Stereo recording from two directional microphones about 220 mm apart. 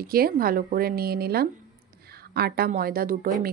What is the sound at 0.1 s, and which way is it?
A woman's voice, 40° right (ahead or behind).